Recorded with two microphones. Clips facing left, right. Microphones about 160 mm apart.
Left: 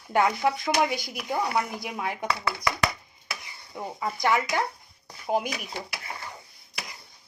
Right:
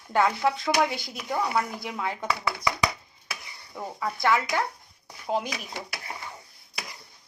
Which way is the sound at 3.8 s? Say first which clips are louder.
Even; 15° left (ahead or behind).